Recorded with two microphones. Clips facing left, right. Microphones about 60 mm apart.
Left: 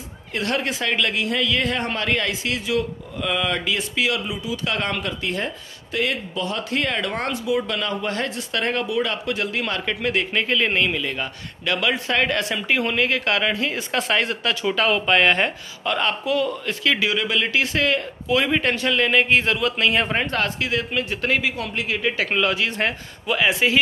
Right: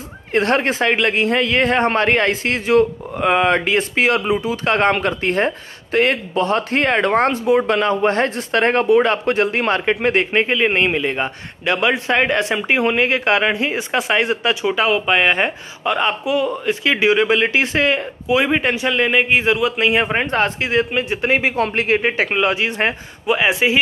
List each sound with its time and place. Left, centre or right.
0.3 s a man's voice: right